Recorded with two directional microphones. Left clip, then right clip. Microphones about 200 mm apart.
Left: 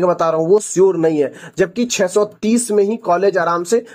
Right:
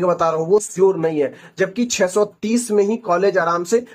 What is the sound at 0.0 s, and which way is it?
Speech, 40° left (ahead or behind).